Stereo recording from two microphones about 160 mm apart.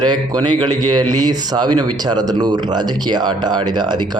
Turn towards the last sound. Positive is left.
turn(degrees=-30)  # may be behind; listen again after turning